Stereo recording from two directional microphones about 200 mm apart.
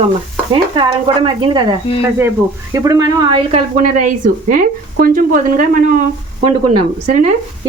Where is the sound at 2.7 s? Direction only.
15° right (ahead or behind).